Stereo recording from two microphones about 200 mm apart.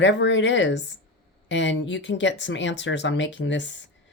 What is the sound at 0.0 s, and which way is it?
Speech, 65° left (ahead or behind).